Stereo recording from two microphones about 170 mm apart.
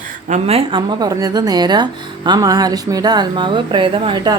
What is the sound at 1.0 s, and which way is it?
Speech, 20° right (ahead or behind).